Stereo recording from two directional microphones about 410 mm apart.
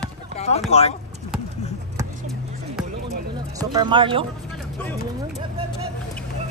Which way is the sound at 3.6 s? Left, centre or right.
Centre.